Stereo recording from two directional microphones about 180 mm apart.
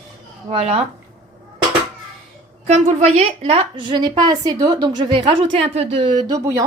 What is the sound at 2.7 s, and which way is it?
A woman's voice, 40° right (ahead or behind).